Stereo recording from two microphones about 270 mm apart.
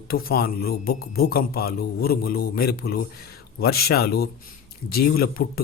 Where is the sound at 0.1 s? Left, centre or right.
Left.